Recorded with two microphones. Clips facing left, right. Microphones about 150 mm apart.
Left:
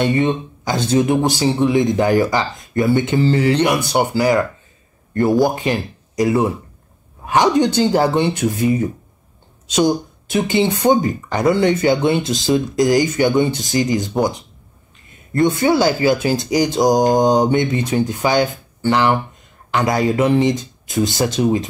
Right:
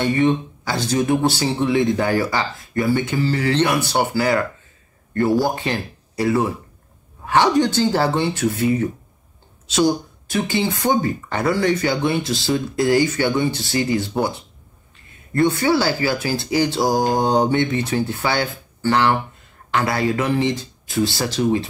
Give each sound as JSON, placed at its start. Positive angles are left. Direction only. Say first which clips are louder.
{"t": 0.0, "sound": "speech", "louder": "left 1 dB", "side_deg": 20}
{"t": 5.4, "sound": "speech", "louder": "left 5 dB", "side_deg": 15}